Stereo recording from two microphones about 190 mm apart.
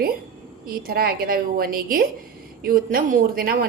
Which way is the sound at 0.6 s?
50° right (ahead or behind).